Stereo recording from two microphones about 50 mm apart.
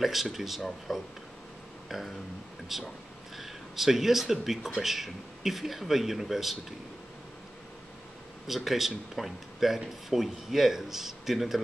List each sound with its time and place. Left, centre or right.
0.0 s speech: centre
8.5 s speech: centre